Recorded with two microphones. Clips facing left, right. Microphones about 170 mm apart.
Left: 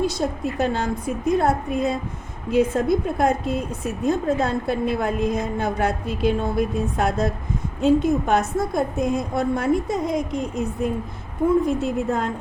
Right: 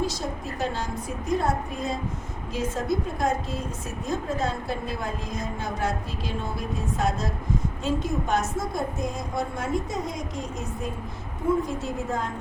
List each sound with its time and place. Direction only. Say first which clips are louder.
0.2 s a woman's voice: left 7 dB; 65° left (ahead or behind)